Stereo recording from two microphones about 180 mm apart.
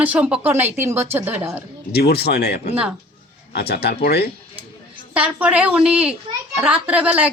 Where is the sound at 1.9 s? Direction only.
60° left (ahead or behind).